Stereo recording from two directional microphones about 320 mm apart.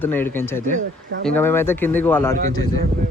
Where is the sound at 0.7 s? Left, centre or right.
Right.